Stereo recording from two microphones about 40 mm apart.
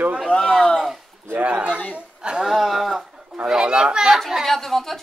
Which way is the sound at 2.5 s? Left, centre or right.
Centre.